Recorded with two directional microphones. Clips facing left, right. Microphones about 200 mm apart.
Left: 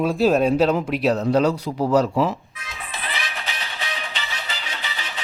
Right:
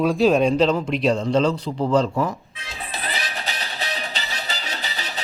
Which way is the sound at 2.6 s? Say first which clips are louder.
Right 2 dB; 30° right (ahead or behind).